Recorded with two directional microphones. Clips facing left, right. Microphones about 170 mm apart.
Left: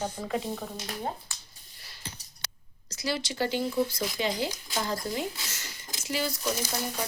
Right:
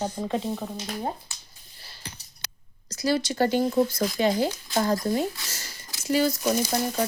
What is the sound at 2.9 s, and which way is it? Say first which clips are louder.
Speech: right 7 dB; 45° right (ahead or behind).